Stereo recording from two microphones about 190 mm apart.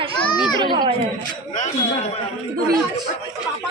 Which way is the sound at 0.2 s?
25° left (ahead or behind).